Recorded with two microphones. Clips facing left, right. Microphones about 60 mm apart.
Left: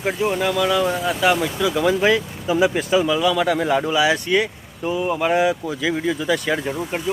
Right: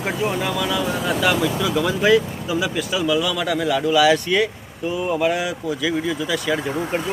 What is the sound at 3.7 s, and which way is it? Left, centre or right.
Speech, left.